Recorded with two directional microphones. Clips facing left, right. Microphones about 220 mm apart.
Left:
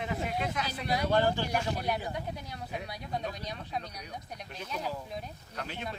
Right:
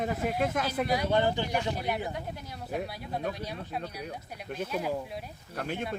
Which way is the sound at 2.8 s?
5° right (ahead or behind).